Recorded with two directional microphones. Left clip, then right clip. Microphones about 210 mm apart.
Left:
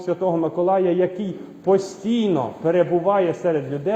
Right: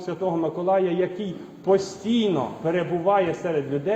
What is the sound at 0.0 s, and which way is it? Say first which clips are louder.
A man's voice: left 4 dB; 45° left (ahead or behind).